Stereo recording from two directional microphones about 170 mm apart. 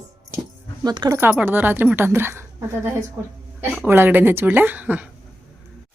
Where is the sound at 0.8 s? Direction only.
20° right (ahead or behind).